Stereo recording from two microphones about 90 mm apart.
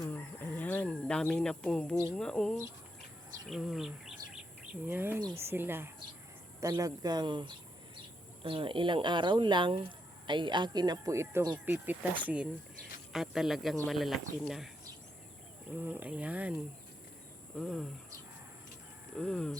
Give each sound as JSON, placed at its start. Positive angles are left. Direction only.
{"t": 0.0, "sound": "a sound", "side_deg": 20}
{"t": 2.1, "sound": "speech", "side_deg": 10}
{"t": 4.9, "sound": "speech", "side_deg": -25}
{"t": 6.6, "sound": "speech", "side_deg": -40}
{"t": 8.4, "sound": "speech", "side_deg": -75}
{"t": 11.1, "sound": "speech", "side_deg": -30}
{"t": 13.1, "sound": "speech", "side_deg": -5}
{"t": 15.7, "sound": "speech", "side_deg": -20}
{"t": 17.5, "sound": "speech", "side_deg": 5}
{"t": 19.1, "sound": "speech", "side_deg": 10}